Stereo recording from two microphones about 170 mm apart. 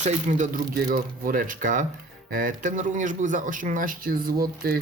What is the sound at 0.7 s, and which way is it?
Speech, 60° right (ahead or behind).